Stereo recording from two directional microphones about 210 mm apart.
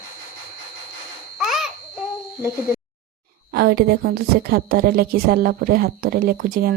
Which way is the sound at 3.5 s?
45° right (ahead or behind).